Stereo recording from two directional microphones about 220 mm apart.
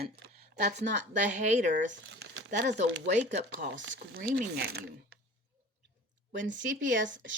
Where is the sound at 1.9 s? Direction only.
55° right (ahead or behind).